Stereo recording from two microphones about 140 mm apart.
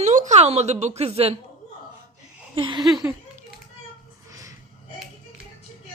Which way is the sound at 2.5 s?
35° right (ahead or behind).